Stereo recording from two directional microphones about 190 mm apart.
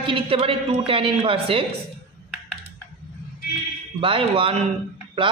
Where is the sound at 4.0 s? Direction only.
30° right (ahead or behind).